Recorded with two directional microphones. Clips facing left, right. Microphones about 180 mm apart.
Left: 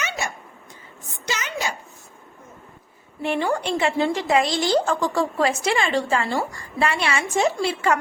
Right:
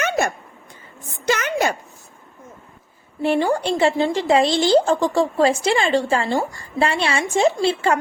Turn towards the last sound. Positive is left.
turn(degrees=-30)  # may be behind; listen again after turning